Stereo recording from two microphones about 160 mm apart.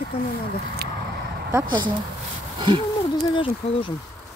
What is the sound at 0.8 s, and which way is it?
Speech, 85° right.